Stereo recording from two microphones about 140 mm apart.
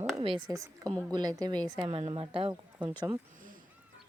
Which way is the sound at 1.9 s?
40° right (ahead or behind).